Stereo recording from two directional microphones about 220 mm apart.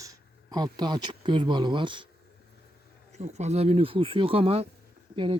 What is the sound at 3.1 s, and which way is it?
Speech, 30° right (ahead or behind).